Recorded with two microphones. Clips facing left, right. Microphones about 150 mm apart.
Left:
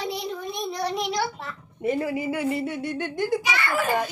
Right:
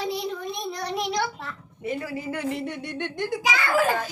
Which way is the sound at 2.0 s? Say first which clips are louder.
Left 4 dB; 10° left (ahead or behind).